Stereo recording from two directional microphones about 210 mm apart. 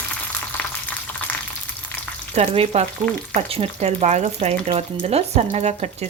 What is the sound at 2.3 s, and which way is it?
Frying, 30° right (ahead or behind).